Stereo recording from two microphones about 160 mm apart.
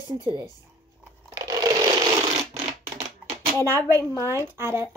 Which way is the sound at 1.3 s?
20° right (ahead or behind).